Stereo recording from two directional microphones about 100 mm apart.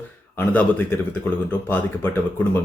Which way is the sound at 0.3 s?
20° left (ahead or behind).